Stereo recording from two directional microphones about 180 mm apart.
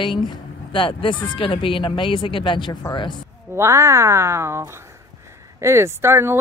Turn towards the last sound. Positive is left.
turn(degrees=-15)  # may be behind; listen again after turning